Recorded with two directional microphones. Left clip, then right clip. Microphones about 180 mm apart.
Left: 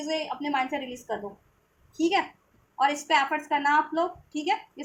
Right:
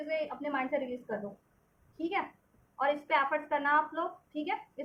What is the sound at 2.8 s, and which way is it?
A woman's voice, 30° left (ahead or behind).